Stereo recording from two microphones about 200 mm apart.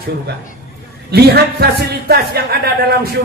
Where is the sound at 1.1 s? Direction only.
50° right (ahead or behind).